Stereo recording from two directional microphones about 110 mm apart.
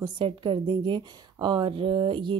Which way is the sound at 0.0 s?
45° right (ahead or behind).